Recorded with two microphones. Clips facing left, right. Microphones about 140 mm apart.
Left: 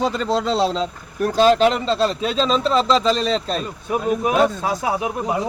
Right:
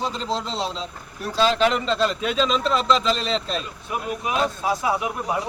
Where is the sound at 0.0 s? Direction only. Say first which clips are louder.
Left 6 dB; 70° left (ahead or behind).